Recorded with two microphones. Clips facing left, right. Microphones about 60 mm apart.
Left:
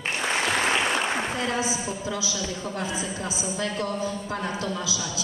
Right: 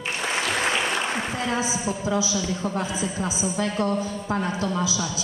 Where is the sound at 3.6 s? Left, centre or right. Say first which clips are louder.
Right 3 dB; right.